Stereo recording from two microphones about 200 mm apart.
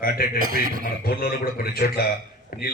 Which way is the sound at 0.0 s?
50° left (ahead or behind).